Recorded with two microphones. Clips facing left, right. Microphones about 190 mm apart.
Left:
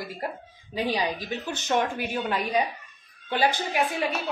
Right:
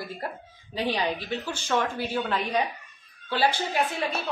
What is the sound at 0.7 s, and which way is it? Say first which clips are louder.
A woman's voice: even; 10° left (ahead or behind).